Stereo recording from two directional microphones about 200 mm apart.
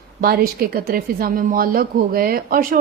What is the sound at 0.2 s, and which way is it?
Speech, 50° right (ahead or behind).